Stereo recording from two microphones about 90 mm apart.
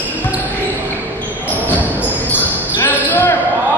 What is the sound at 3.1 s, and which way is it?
Basketball bounce, 20° left (ahead or behind).